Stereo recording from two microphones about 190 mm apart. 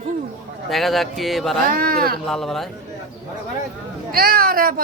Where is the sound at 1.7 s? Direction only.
50° right (ahead or behind).